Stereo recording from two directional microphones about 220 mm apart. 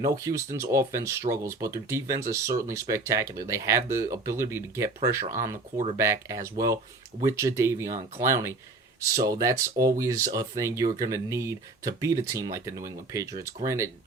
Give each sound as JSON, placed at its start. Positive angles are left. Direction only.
{"t": 0.0, "sound": "speech", "side_deg": -15}
{"t": 5.2, "sound": "speech", "side_deg": -35}
{"t": 6.0, "sound": "speech", "side_deg": -15}